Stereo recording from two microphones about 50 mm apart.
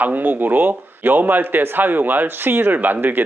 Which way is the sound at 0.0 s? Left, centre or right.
Right.